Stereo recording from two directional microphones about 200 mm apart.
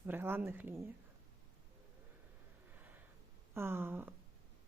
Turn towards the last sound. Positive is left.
turn(degrees=-10)  # may be behind; listen again after turning